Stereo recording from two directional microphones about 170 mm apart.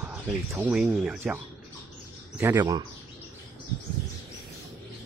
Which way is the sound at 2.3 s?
15° right (ahead or behind).